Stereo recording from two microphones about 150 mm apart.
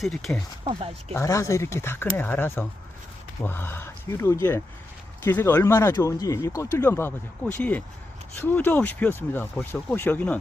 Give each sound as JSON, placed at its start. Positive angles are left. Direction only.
{"t": 0.0, "sound": "speech", "side_deg": 0}
{"t": 1.1, "sound": "speech", "side_deg": 20}